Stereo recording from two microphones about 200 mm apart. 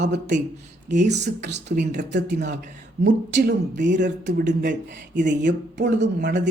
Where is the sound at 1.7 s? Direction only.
40° right (ahead or behind).